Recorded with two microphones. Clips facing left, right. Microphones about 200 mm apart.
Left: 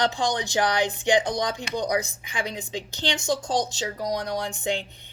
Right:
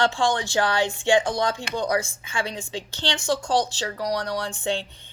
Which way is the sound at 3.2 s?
40° left (ahead or behind).